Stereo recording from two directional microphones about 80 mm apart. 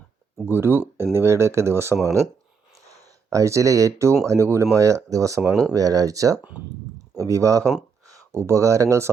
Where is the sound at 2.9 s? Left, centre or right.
Right.